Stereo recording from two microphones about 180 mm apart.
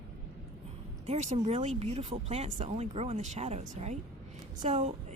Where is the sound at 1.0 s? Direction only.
40° right (ahead or behind).